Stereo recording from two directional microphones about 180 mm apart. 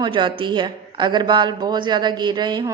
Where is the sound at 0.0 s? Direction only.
25° right (ahead or behind).